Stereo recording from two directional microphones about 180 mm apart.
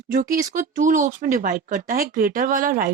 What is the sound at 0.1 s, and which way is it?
Speech, 50° right (ahead or behind).